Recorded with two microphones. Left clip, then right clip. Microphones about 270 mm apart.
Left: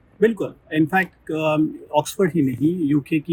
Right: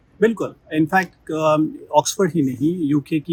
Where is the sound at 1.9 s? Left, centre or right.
Centre.